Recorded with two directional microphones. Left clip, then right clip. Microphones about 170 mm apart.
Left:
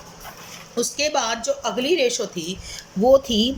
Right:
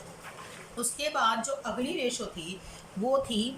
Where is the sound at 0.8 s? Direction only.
55° left (ahead or behind).